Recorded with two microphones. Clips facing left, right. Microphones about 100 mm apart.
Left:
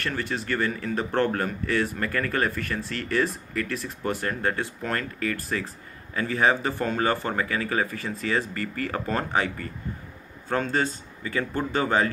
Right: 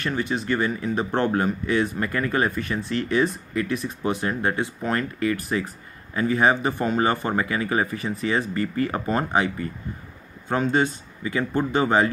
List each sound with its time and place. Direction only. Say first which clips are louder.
0.0 s speech: right 4 dB; 15° right (ahead or behind)